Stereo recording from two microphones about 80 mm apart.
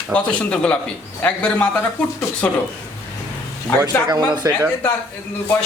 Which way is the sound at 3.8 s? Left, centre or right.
Right.